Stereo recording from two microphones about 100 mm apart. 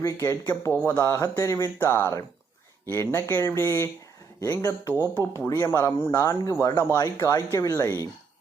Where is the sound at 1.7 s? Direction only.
20° left (ahead or behind).